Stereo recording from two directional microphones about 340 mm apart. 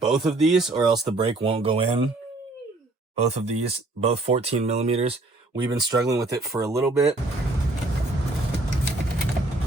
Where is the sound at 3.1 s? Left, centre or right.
Centre.